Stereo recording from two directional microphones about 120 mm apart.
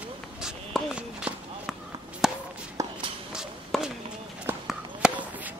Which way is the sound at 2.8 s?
25° right (ahead or behind).